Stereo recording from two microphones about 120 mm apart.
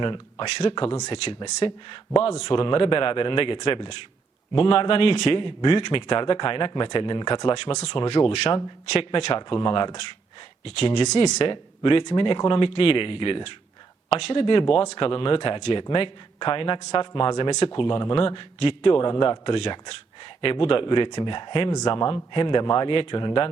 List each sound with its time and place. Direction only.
0.0 s a man's voice: 45° left (ahead or behind)
2.2 s a man's voice: 55° left (ahead or behind)
7.5 s a man's voice: 60° left (ahead or behind)
9.6 s a man's voice: 40° left (ahead or behind)
10.6 s speech: 55° left (ahead or behind)
11.3 s a man's voice: 45° left (ahead or behind)